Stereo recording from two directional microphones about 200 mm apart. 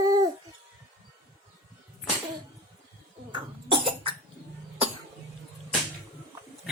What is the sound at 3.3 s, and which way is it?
Cough, 25° right (ahead or behind).